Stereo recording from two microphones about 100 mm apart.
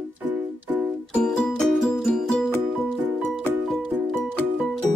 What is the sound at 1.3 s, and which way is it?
Music, 5° left (ahead or behind).